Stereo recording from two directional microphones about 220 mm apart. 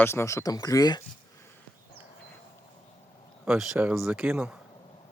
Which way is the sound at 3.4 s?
Centre (ahead or behind).